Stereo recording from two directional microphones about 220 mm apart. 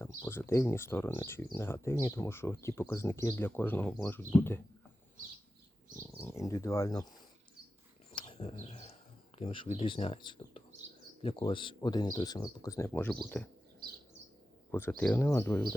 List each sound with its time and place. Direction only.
0.0 s speech: 10° left (ahead or behind)
6.0 s speech: 10° left (ahead or behind)
8.1 s bird: 25° left (ahead or behind)
9.4 s speech: 25° left (ahead or behind); by 13.5 s 5° left (ahead or behind)
14.7 s speech: 10° left (ahead or behind)